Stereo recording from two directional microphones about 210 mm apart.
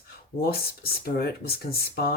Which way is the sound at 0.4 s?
45° left (ahead or behind).